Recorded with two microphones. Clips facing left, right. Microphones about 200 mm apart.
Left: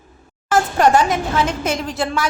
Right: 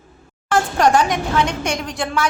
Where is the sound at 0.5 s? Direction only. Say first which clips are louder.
Left 1 dB; 5° left (ahead or behind).